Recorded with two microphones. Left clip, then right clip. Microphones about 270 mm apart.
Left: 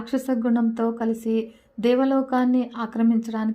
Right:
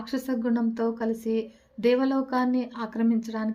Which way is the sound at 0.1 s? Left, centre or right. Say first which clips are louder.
Left 4 dB; centre.